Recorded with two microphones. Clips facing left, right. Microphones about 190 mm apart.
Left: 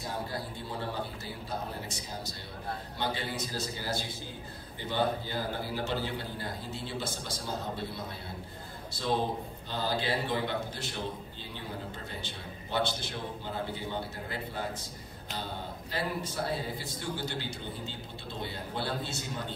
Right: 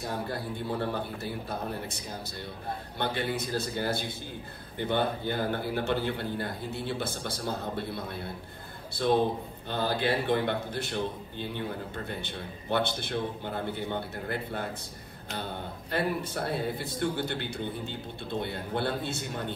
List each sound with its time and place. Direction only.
0.3 s a man's voice: 55° right (ahead or behind)